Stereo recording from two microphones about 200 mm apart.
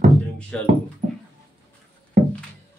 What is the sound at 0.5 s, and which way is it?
Speech, 5° left (ahead or behind).